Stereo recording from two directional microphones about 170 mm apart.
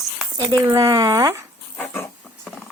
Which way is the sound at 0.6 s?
20° right (ahead or behind).